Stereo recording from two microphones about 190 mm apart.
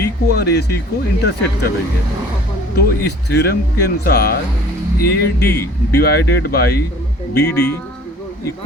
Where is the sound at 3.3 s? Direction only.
60° left (ahead or behind).